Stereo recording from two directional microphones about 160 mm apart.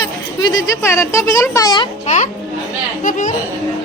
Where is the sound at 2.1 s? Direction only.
45° left (ahead or behind).